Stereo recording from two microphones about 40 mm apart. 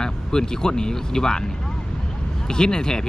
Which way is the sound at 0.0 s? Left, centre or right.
Centre.